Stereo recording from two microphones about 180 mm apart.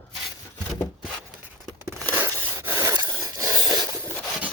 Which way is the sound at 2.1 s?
15° right (ahead or behind).